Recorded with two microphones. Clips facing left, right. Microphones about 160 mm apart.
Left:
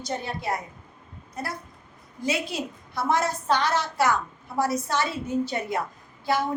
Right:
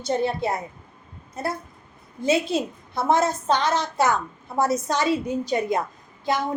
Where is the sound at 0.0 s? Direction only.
25° right (ahead or behind).